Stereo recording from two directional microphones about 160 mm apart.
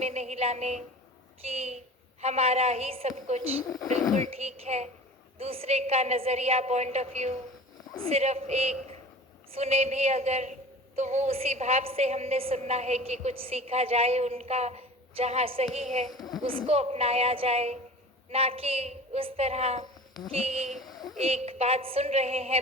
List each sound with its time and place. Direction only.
0.0 s a sound: 40° right (ahead or behind)
1.5 s a woman's voice: 40° right (ahead or behind)
3.7 s speech: centre (ahead or behind)
4.2 s a woman's voice: 40° right (ahead or behind)
20.7 s speech: centre (ahead or behind)
20.9 s a sound: 25° left (ahead or behind)
21.2 s a woman's voice: 40° right (ahead or behind)